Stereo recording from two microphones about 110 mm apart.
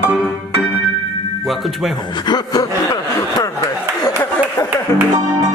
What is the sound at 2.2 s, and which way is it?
Chuckle, 40° left (ahead or behind).